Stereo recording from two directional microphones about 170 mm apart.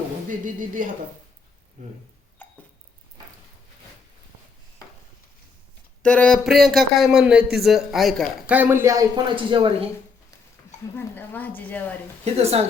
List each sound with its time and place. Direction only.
0.3 s speech: 50° right (ahead or behind)
6.0 s a man's voice: 10° left (ahead or behind); by 9.7 s 30° right (ahead or behind)
10.9 s a woman's voice: 10° left (ahead or behind)
12.2 s a woman's voice: 40° right (ahead or behind)